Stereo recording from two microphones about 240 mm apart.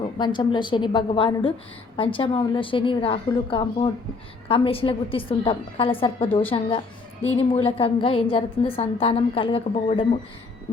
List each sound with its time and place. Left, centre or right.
0.2 s a woman's voice: centre